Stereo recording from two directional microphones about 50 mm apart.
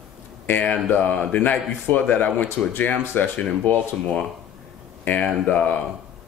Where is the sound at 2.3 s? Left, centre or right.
Left.